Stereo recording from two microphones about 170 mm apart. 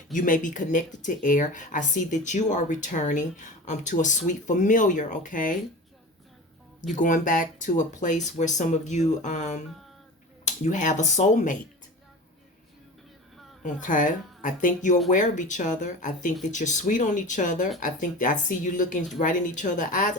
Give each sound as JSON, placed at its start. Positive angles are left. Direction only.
{"t": 0.1, "sound": "speech", "side_deg": 50}
{"t": 6.9, "sound": "speech", "side_deg": 50}
{"t": 13.6, "sound": "speech", "side_deg": 50}